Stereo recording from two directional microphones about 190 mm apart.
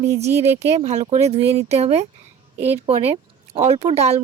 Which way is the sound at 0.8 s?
35° right (ahead or behind).